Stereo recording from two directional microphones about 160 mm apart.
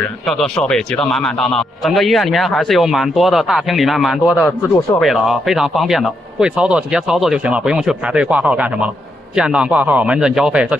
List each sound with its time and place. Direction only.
0.4 s a man's voice: 5° left (ahead or behind)